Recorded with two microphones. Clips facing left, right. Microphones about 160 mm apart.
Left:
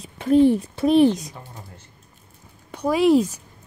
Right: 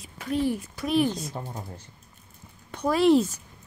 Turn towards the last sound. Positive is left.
turn(degrees=10)  # may be behind; listen again after turning